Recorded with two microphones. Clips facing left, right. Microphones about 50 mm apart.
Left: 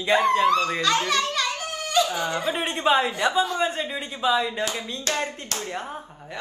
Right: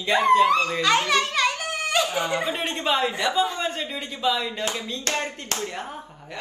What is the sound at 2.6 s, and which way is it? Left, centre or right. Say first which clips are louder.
Speech: left 6 dB; left.